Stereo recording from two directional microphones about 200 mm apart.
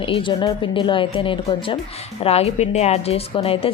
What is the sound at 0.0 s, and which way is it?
A woman's voice, 25° left (ahead or behind).